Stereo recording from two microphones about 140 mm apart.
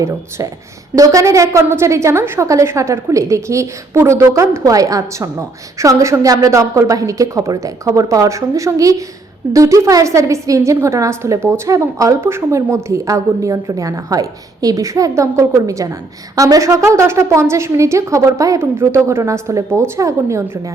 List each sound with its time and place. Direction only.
0.9 s a woman's voice: 25° right (ahead or behind)